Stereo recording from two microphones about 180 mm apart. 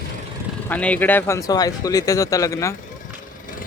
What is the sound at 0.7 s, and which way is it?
Speech, 10° left (ahead or behind).